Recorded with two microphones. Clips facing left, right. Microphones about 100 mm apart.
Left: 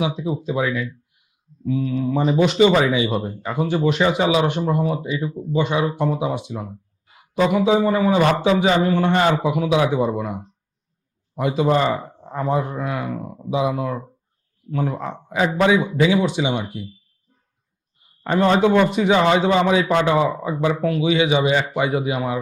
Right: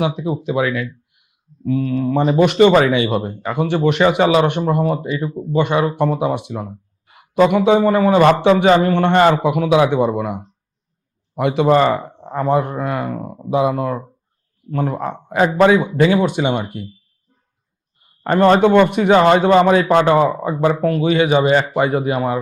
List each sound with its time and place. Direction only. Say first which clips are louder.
0.2 s speech: right 3 dB; 65° right (ahead or behind)
18.0 s a man's voice: right 5 dB; 55° right (ahead or behind)